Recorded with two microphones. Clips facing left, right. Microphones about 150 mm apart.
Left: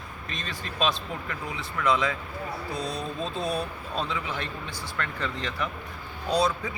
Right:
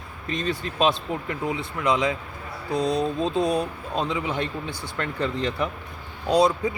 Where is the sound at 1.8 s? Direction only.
20° right (ahead or behind).